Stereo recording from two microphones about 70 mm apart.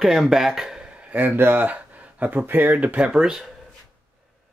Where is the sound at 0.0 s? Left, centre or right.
Centre.